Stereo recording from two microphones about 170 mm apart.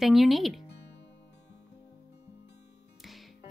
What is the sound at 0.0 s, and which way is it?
Speech, centre (ahead or behind).